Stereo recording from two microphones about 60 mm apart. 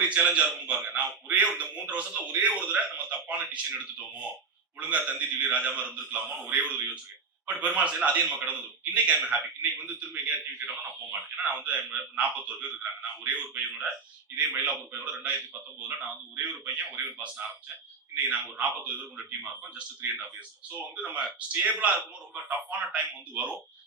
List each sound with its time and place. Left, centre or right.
0.0 s a man's voice: right
16.4 s a man's voice: right